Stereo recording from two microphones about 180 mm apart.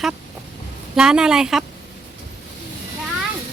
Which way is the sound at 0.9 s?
5° right (ahead or behind).